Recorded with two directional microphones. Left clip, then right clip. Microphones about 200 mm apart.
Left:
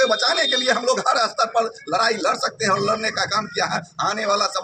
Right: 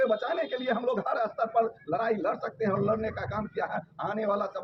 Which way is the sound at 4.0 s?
5° left (ahead or behind).